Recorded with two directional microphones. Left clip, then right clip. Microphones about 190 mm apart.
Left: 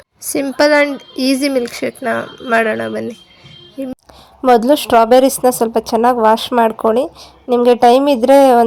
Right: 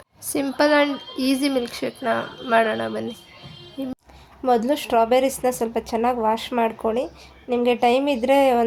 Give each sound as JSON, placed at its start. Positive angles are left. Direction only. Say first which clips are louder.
{"t": 0.3, "sound": "a woman's voice", "louder": "left 7 dB", "side_deg": 30}
{"t": 4.4, "sound": "a woman's voice", "louder": "left 10 dB", "side_deg": 40}